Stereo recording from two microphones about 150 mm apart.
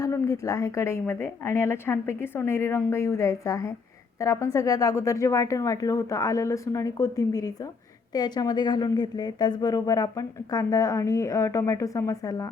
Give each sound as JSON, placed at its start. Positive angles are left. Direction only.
{"t": 0.0, "sound": "a woman's voice", "side_deg": 20}